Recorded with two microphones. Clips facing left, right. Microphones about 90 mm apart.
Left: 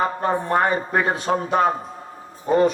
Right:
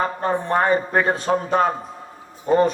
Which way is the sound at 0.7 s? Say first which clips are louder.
Right 2 dB; 35° right (ahead or behind).